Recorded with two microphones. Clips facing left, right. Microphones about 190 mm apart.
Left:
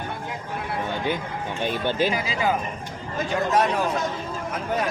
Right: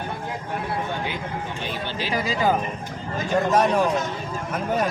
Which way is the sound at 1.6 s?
50° left (ahead or behind).